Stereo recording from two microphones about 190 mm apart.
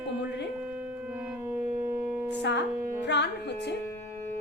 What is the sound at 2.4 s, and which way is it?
Speech, 70° left (ahead or behind).